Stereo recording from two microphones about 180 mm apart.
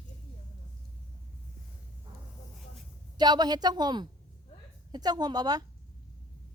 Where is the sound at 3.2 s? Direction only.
25° right (ahead or behind).